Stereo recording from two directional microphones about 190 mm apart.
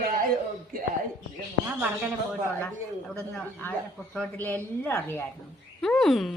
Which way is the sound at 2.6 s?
5° left (ahead or behind).